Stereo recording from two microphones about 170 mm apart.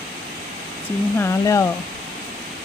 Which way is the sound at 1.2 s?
20° left (ahead or behind).